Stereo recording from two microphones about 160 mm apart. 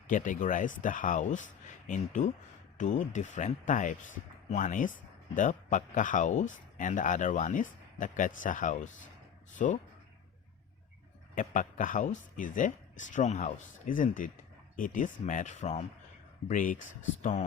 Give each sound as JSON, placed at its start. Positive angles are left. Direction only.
{"t": 0.1, "sound": "speech", "side_deg": 55}
{"t": 11.3, "sound": "speech", "side_deg": 55}